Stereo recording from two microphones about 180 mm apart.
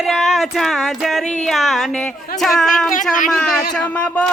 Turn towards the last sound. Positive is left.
turn(degrees=5)  # may be behind; listen again after turning